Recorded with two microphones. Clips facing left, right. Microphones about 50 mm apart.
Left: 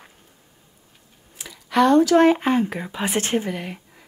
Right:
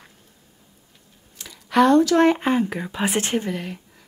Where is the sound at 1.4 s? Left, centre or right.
Centre.